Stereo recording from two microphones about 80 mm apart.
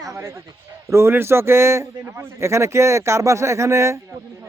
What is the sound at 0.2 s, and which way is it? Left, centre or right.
A man's voice, right.